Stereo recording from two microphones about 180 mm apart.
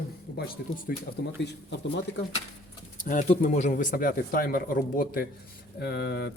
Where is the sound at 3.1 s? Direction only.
45° left (ahead or behind).